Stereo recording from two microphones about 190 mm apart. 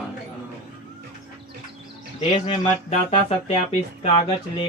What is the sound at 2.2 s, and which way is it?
Speech, 30° left (ahead or behind).